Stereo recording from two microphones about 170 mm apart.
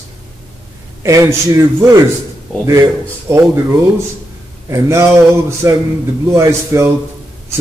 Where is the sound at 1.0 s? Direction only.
15° right (ahead or behind).